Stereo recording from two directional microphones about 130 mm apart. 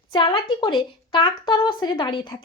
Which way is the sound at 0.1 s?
40° left (ahead or behind).